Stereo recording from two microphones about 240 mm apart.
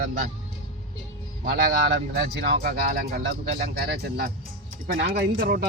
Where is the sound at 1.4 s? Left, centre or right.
Right.